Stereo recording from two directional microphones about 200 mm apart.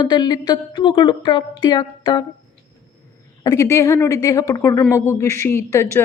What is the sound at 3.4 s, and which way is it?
A woman's voice, 15° left (ahead or behind).